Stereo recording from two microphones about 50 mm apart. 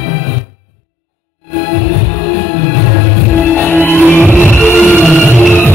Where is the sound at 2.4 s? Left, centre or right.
Left.